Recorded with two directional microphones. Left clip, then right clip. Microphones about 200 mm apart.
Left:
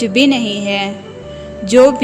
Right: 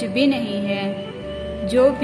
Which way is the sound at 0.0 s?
35° left (ahead or behind).